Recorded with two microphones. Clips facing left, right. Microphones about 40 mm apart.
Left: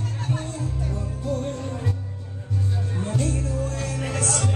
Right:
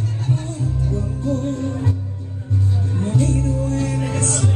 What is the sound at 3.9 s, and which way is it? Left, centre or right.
Music, right.